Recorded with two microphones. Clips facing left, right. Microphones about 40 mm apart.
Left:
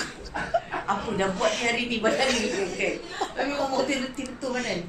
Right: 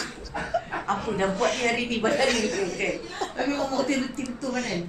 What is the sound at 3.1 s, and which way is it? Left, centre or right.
Speech, centre.